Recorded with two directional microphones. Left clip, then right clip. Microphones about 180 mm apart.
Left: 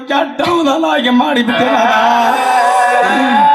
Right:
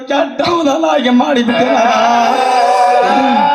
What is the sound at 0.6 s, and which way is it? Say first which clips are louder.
Speech: right 1 dB; 25° left (ahead or behind).